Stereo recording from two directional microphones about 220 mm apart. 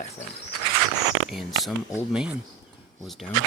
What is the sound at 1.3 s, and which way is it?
Speech, centre (ahead or behind).